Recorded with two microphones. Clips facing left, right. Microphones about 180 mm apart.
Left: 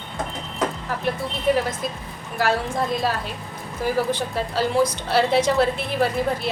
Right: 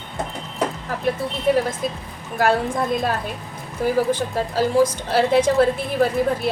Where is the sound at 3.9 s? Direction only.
45° right (ahead or behind).